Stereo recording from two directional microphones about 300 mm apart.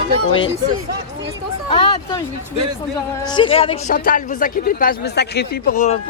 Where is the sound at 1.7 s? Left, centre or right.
Centre.